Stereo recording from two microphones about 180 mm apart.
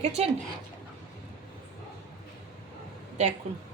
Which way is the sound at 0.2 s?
35° right (ahead or behind).